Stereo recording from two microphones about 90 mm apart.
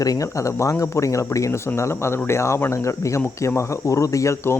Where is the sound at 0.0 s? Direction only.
40° left (ahead or behind).